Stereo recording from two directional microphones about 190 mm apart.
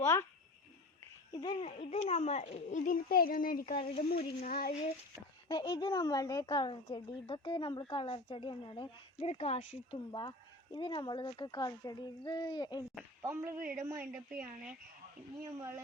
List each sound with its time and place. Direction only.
0.0 s speech: 15° left (ahead or behind)
1.3 s a child's voice: 25° left (ahead or behind); by 4.7 s 45° left (ahead or behind)
5.5 s a woman's voice: 25° left (ahead or behind)
10.1 s a woman's voice: 25° left (ahead or behind)
13.2 s speech: 15° right (ahead or behind)